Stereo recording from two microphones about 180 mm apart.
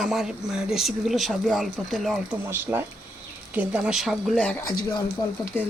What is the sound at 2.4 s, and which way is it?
Speech, 10° right (ahead or behind).